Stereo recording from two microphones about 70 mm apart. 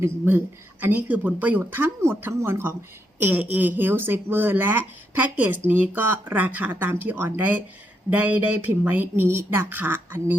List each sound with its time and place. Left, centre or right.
0.3 s speech: right